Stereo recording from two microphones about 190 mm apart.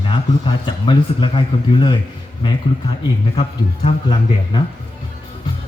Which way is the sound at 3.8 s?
25° left (ahead or behind).